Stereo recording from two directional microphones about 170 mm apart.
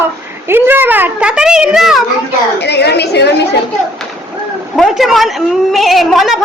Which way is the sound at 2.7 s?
75° left (ahead or behind).